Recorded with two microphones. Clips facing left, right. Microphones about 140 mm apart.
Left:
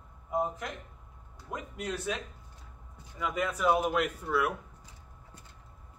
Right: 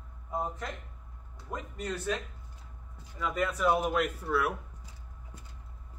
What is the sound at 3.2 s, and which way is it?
A man's voice, centre (ahead or behind).